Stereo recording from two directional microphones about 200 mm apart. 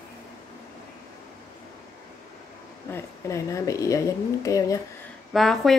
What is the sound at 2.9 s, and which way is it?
A woman's voice, 15° left (ahead or behind).